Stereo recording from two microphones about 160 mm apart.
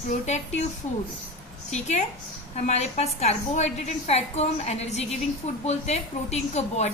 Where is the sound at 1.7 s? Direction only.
45° left (ahead or behind).